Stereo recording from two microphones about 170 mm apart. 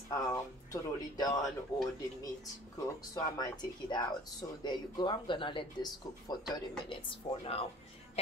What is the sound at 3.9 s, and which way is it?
Speech, 25° left (ahead or behind).